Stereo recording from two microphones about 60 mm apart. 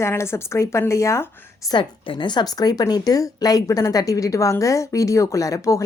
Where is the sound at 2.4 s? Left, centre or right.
Left.